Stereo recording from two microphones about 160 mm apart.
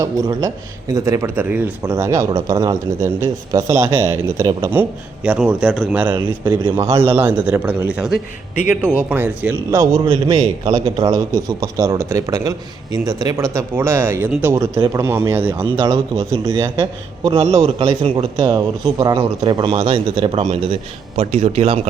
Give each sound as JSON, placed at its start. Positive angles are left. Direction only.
{"t": 0.0, "sound": "a man's voice", "side_deg": -20}
{"t": 9.7, "sound": "a man's voice", "side_deg": -25}
{"t": 15.6, "sound": "speech", "side_deg": -30}
{"t": 21.2, "sound": "speech", "side_deg": -45}